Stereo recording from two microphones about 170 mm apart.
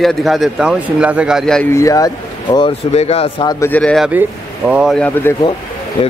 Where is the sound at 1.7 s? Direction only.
20° left (ahead or behind).